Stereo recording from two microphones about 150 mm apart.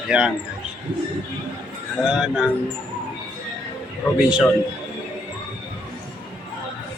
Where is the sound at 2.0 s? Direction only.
5° right (ahead or behind).